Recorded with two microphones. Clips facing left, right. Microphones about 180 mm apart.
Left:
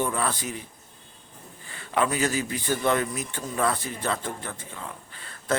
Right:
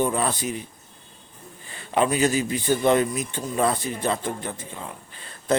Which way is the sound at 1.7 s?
20° right (ahead or behind).